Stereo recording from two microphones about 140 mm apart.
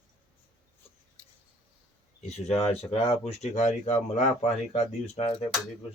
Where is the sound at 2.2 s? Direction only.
50° left (ahead or behind).